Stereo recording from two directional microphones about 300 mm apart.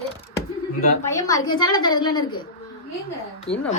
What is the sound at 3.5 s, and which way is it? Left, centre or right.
Speech, left.